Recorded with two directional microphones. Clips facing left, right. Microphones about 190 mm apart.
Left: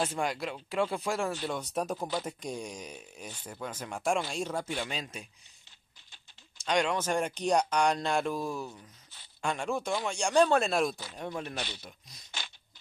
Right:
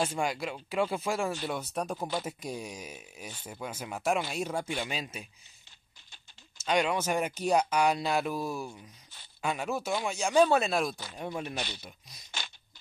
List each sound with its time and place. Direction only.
0.0 s speech: centre (ahead or behind)
6.6 s speech: 5° right (ahead or behind)
12.3 s crunch: 45° right (ahead or behind)